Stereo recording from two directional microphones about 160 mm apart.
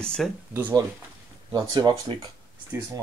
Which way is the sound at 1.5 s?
25° right (ahead or behind).